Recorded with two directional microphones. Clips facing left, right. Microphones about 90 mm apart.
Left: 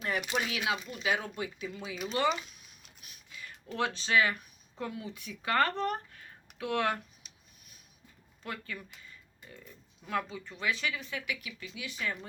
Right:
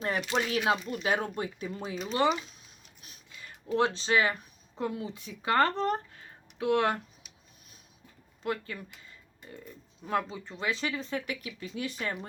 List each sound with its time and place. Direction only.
0.2 s speech: 15° left (ahead or behind)
0.5 s speech: 40° right (ahead or behind)
2.2 s speech: 25° right (ahead or behind)
3.0 s a sound: 30° right (ahead or behind)
3.8 s speech: 25° right (ahead or behind)
8.4 s speech: 30° right (ahead or behind)
10.1 s speech: 25° right (ahead or behind)